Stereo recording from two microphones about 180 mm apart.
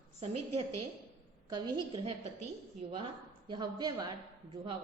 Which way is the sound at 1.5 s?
25° right (ahead or behind).